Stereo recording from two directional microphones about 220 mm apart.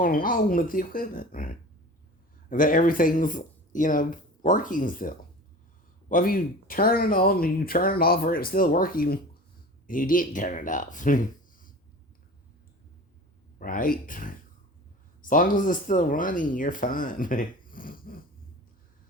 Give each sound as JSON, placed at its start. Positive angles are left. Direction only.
{"t": 0.0, "sound": "speech", "side_deg": 40}
{"t": 13.6, "sound": "speech", "side_deg": 40}